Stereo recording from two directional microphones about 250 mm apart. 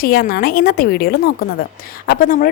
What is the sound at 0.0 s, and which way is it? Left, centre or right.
A woman's voice, left.